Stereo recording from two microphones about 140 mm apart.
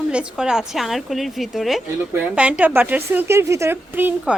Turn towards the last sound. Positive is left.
turn(degrees=-15)  # may be behind; listen again after turning